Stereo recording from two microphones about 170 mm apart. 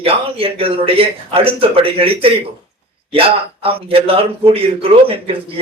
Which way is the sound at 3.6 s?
35° right (ahead or behind).